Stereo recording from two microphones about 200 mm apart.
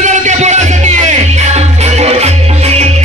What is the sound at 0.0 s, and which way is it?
Music, 35° right (ahead or behind).